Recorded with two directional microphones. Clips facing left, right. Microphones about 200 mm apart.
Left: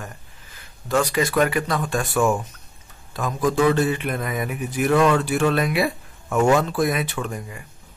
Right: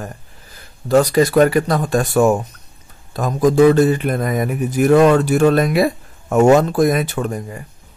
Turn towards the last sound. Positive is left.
turn(degrees=-40)  # may be behind; listen again after turning